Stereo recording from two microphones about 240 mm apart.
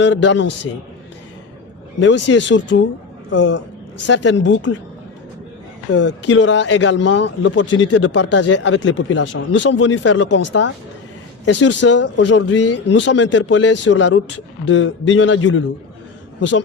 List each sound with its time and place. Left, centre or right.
0.0 s speech: left
2.0 s speech: left
5.9 s speech: left